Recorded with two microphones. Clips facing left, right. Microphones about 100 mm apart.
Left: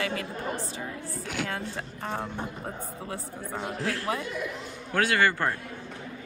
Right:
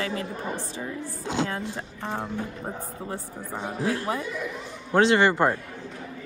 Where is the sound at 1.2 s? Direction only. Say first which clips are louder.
Right 5 dB; 25° right (ahead or behind).